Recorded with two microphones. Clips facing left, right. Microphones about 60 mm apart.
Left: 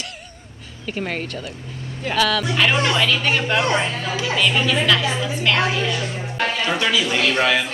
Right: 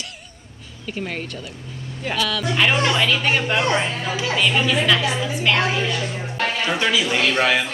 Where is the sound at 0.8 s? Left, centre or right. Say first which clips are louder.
Left 2 dB; left.